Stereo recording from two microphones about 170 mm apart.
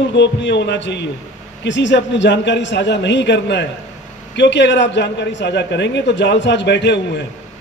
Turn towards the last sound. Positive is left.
turn(degrees=90)